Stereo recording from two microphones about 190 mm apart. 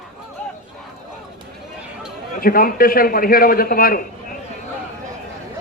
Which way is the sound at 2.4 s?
50° left (ahead or behind).